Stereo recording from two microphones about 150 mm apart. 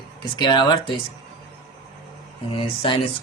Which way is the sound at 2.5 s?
35° left (ahead or behind).